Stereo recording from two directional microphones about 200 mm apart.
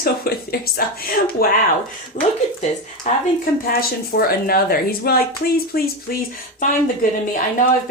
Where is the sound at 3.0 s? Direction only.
40° left (ahead or behind).